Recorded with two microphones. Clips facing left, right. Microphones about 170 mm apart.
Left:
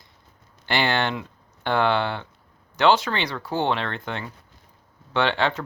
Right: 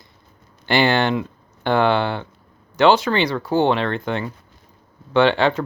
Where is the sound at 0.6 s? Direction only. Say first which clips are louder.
Right 6 dB; 5° right (ahead or behind).